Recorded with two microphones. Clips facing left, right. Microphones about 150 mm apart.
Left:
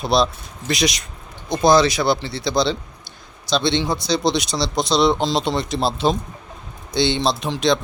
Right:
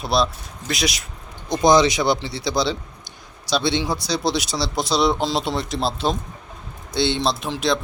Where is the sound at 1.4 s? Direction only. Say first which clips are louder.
Left 1 dB; 15° right (ahead or behind).